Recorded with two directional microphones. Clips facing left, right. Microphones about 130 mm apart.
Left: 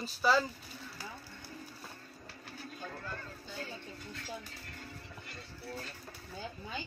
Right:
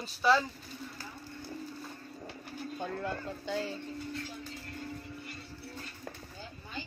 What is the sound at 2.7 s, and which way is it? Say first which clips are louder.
Speech: right 8 dB; 75° right (ahead or behind).